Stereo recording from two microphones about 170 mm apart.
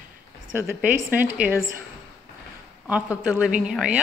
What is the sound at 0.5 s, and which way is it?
A woman's voice, 10° right (ahead or behind).